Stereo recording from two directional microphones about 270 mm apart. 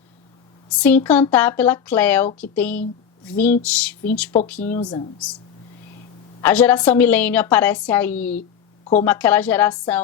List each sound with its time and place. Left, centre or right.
0.7 s a woman's voice: centre
4.8 s speech: centre
6.4 s a woman's voice: centre
8.4 s a sound: left
9.0 s a woman's voice: centre